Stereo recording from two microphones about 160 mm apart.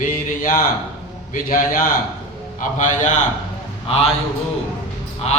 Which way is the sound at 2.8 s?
50° left (ahead or behind).